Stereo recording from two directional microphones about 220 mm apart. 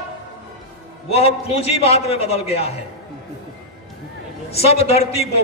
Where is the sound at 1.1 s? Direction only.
30° left (ahead or behind).